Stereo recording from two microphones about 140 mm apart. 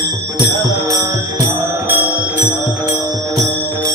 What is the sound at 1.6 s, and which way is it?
Music, 15° right (ahead or behind).